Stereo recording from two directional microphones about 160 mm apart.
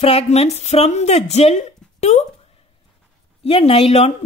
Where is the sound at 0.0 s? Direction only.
40° left (ahead or behind).